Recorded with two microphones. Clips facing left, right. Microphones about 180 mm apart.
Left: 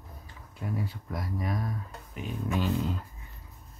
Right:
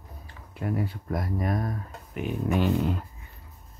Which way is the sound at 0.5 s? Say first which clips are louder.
Right 5 dB; 65° right (ahead or behind).